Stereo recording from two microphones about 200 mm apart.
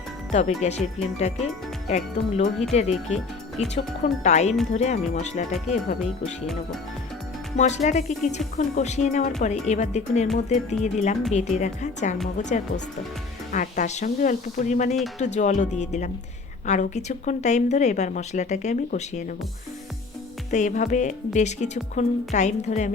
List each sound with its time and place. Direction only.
0.3 s a woman's voice: 35° left (ahead or behind)
1.9 s a woman's voice: 35° left (ahead or behind)
7.5 s a woman's voice: 35° left (ahead or behind)
20.5 s a woman's voice: 40° left (ahead or behind)